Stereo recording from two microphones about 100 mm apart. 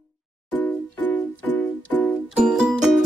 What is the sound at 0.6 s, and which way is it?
Music, 15° left (ahead or behind).